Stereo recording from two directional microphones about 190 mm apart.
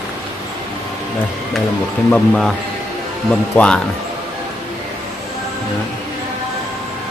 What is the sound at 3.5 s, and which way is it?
Speech, 5° left (ahead or behind).